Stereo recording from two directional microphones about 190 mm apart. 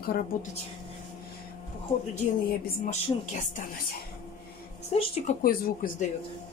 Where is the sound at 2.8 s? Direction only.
40° left (ahead or behind).